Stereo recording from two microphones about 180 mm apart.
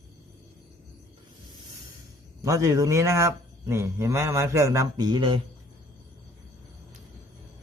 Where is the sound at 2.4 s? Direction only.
20° right (ahead or behind).